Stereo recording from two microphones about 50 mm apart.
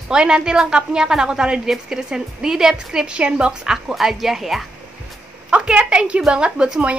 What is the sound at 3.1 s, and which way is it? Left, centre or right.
Speech, right.